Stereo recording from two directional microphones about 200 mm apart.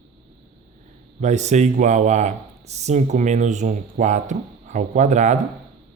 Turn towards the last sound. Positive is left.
turn(degrees=-35)  # may be behind; listen again after turning